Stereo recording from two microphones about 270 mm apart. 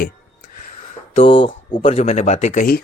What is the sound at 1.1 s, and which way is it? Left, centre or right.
Speech, centre.